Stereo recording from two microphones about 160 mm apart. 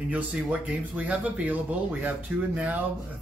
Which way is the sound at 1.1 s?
10° right (ahead or behind).